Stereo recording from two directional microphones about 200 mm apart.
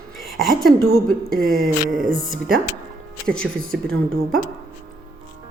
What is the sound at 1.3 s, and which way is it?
A woman's voice, 45° right (ahead or behind).